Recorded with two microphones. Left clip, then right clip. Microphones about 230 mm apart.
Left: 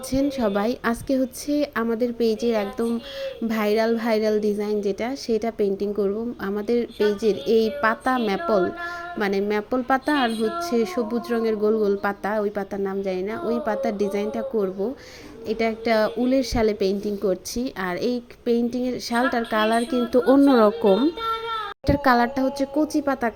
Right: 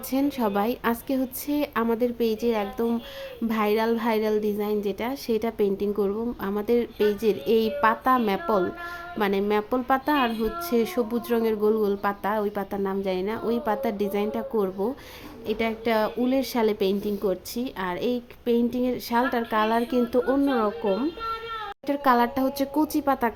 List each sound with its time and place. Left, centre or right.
0.1 s a woman's voice: centre
20.1 s speech: centre
21.8 s speech: centre